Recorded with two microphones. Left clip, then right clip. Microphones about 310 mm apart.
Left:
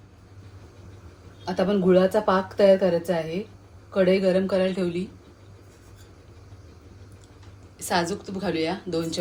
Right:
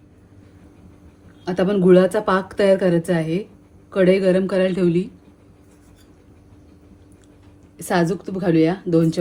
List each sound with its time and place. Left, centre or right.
1.5 s speech: right
7.8 s speech: right